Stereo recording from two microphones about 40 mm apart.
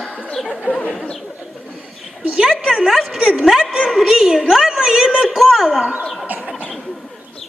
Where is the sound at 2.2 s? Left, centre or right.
Centre.